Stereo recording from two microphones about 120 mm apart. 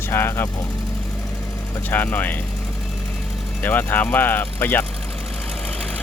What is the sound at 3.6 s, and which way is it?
Speech, 15° left (ahead or behind).